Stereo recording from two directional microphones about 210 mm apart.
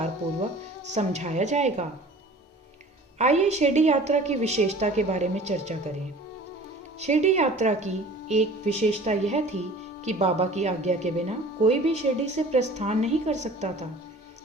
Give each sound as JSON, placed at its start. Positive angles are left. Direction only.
{"t": 0.9, "sound": "a woman's voice", "side_deg": -35}
{"t": 3.2, "sound": "a woman's voice", "side_deg": -30}
{"t": 7.0, "sound": "a woman's voice", "side_deg": -35}